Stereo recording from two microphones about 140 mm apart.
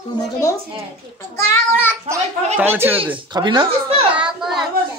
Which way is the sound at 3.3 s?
30° right (ahead or behind).